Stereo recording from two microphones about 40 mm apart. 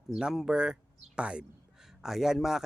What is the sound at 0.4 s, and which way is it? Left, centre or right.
Speech, right.